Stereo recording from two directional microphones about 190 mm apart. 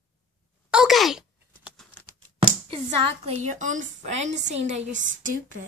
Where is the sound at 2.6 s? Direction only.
30° right (ahead or behind).